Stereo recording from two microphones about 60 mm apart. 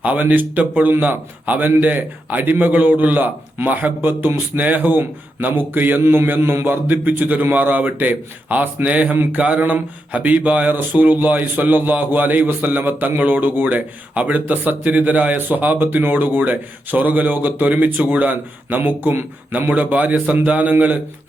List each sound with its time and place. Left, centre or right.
0.0 s a man's voice: right
18.3 s a man's voice: right